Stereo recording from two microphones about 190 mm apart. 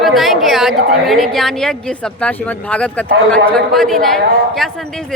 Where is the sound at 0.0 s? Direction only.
Centre (ahead or behind).